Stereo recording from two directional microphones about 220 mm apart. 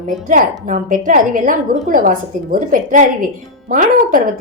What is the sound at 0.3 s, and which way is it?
A woman's voice, 35° right (ahead or behind).